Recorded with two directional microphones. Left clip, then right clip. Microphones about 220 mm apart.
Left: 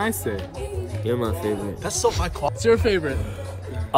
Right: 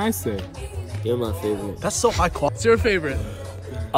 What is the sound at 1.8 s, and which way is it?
Speech, 5° right (ahead or behind).